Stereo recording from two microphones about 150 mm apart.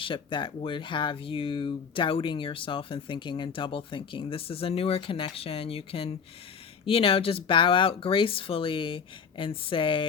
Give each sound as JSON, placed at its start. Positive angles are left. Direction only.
{"t": 0.0, "sound": "speech", "side_deg": 35}